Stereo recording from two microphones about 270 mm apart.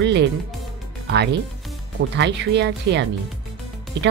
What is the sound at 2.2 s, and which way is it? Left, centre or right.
Speech, right.